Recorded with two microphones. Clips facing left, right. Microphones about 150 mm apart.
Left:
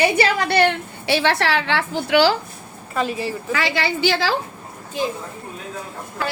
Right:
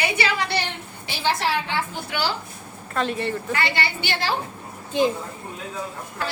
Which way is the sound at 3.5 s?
90° left.